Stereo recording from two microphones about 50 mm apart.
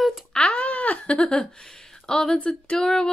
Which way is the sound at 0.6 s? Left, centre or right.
Left.